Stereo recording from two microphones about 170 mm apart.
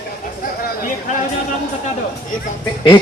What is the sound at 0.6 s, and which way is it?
Speech, 55° left (ahead or behind).